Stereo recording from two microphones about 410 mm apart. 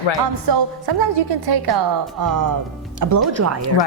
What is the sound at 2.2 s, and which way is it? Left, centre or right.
A woman's voice, right.